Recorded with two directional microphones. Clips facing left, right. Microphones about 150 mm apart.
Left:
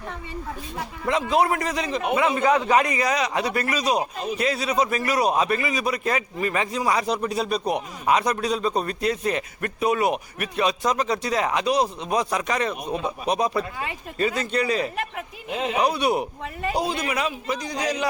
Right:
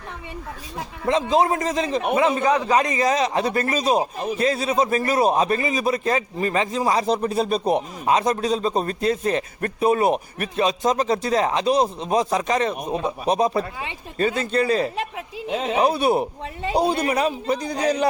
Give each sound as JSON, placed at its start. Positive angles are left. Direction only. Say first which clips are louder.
{"t": 1.0, "sound": "speech", "louder": "right 2 dB", "side_deg": -30}